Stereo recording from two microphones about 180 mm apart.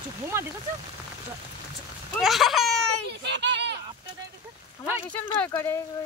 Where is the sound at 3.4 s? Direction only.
75° right (ahead or behind).